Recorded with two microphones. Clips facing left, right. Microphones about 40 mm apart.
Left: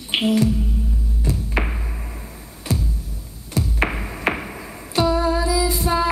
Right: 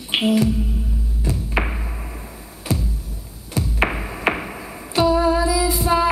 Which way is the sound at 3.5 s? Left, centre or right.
Centre.